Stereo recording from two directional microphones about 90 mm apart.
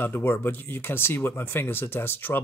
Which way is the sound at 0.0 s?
25° left (ahead or behind).